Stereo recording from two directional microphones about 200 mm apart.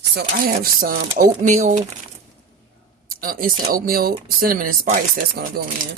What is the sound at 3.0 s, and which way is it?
Speech, 45° right (ahead or behind).